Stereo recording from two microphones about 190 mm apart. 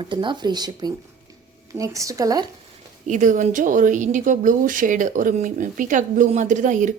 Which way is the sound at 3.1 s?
40° right (ahead or behind).